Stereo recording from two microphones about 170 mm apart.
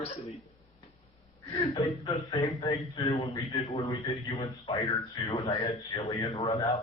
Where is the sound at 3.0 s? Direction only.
40° left (ahead or behind).